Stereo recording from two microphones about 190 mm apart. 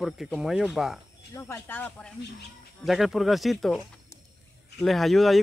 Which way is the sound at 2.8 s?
Centre (ahead or behind).